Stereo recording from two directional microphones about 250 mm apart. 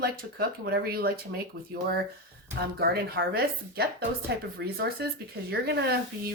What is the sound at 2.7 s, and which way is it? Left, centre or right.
Speech, right.